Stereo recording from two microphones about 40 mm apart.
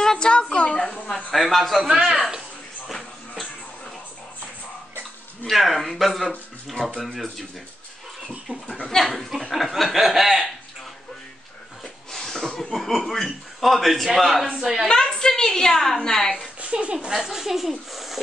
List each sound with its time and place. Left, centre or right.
0.0 s a sound: centre
0.3 s a sound: left
1.1 s speech: centre
2.9 s music: centre
5.5 s a man's voice: centre
8.8 s a man's voice: centre
9.3 s chuckle: centre
11.8 s a sound: centre
12.7 s a man's voice: centre
14.6 s chuckle: centre
14.9 s a woman's voice: centre
16.3 s a woman's voice: right
17.1 s chuckle: centre